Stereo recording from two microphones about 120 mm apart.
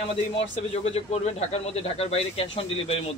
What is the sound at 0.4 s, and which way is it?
Speech, 55° left (ahead or behind).